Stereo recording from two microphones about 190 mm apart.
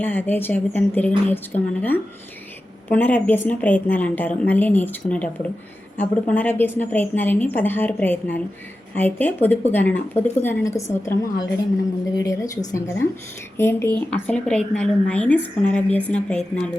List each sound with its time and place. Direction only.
0.0 s a woman's voice: 10° left (ahead or behind)